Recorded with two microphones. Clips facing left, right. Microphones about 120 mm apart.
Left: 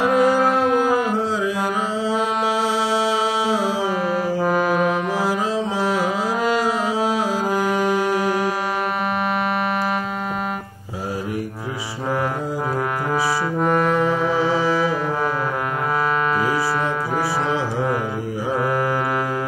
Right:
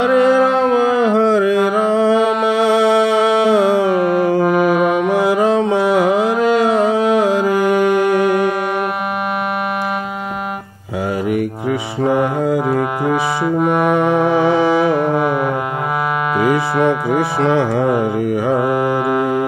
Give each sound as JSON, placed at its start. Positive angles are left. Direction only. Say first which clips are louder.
{"t": 0.0, "sound": "music", "louder": "right 5 dB", "side_deg": -65}
{"t": 13.7, "sound": "music", "louder": "right 4 dB", "side_deg": -60}
{"t": 17.4, "sound": "music", "louder": "right 7 dB", "side_deg": -60}
{"t": 18.7, "sound": "music", "louder": "right 5 dB", "side_deg": -20}